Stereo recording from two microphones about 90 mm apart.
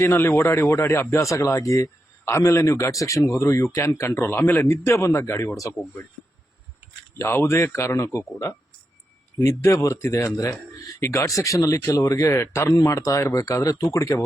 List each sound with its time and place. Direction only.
0.0 s speech: 25° left (ahead or behind)
7.2 s speech: 30° left (ahead or behind)